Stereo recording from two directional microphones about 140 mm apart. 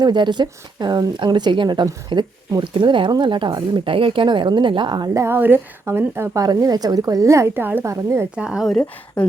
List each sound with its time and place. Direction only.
0.0 s a woman's voice: 30° right (ahead or behind)
8.4 s speech: 5° right (ahead or behind)